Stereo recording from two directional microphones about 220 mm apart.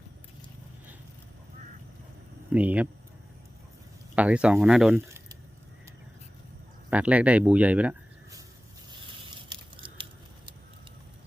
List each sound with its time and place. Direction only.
2.5 s speech: 5° right (ahead or behind)
4.1 s speech: 5° right (ahead or behind)
6.9 s speech: 5° right (ahead or behind)
9.5 s a sound: 20° right (ahead or behind)